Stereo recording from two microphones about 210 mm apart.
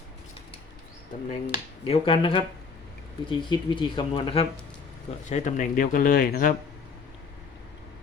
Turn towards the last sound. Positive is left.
turn(degrees=45)  # may be behind; listen again after turning